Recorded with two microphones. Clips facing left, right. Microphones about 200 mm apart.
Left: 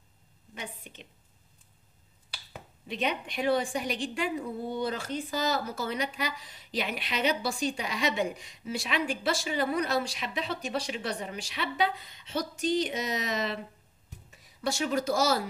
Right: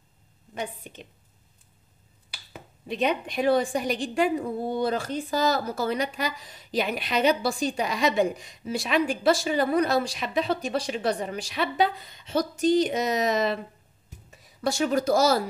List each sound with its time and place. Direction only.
2.9 s a woman's voice: 40° right (ahead or behind)
14.6 s a woman's voice: 40° right (ahead or behind)